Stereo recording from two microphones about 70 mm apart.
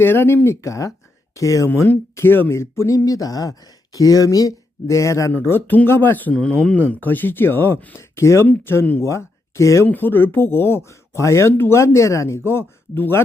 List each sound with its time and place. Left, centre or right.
0.0 s speech: left
0.4 s speech: left
5.3 s speech: left
6.3 s speech: centre
6.7 s speech: left
9.0 s speech: left
9.8 s speech: left
12.5 s speech: left